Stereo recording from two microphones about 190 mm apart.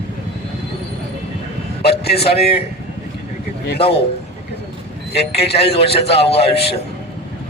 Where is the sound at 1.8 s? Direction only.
60° left (ahead or behind).